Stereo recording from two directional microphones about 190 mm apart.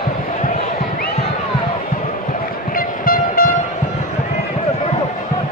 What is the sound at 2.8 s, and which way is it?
Train, 50° left (ahead or behind).